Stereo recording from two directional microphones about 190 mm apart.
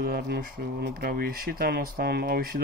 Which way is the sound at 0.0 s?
50° right (ahead or behind).